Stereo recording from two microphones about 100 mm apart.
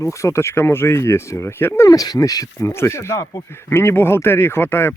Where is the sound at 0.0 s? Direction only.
30° left (ahead or behind).